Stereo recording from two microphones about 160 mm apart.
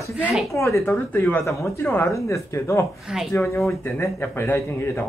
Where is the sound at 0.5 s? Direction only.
20° left (ahead or behind).